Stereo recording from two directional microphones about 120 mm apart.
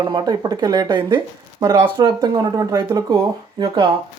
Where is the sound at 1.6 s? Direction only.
25° right (ahead or behind).